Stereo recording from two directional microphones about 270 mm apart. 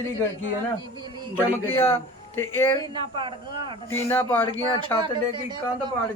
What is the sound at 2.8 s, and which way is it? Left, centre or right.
Speech, centre.